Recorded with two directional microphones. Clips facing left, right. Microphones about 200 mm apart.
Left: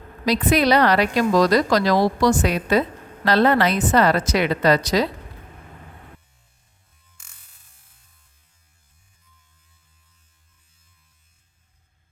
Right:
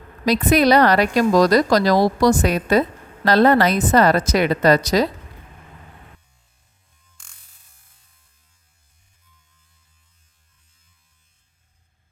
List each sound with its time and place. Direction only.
0.3 s a woman's voice: 45° right (ahead or behind)
7.2 s music: 5° left (ahead or behind)